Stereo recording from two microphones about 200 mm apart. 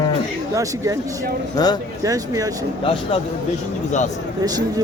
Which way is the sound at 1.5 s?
20° left (ahead or behind).